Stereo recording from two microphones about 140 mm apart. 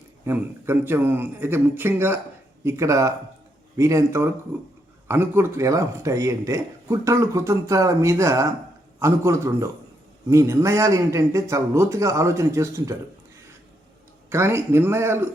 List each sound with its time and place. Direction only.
0.3 s a man's voice: 15° right (ahead or behind)
14.3 s a man's voice: 20° right (ahead or behind)